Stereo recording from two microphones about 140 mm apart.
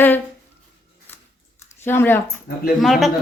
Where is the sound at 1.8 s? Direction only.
15° left (ahead or behind).